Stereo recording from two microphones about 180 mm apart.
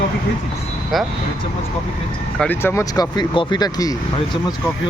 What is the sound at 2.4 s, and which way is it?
Speech, 10° left (ahead or behind).